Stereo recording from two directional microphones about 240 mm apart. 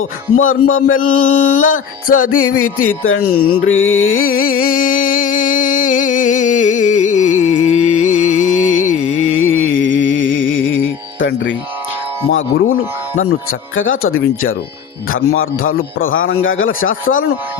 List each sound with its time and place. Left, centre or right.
0.3 s a sound: left
4.6 s music: left
9.0 s music: left
12.3 s speech: left
13.1 s speech: left
13.7 s a sound: left
15.7 s speech: left
16.1 s speech: left